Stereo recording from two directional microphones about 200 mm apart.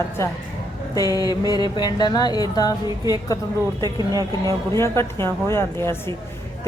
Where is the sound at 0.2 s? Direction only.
15° left (ahead or behind).